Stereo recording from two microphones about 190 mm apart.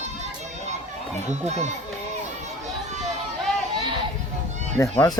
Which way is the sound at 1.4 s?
35° right (ahead or behind).